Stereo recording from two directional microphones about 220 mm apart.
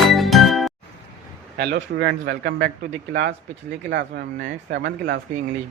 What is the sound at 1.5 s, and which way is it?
Speech, 45° right (ahead or behind).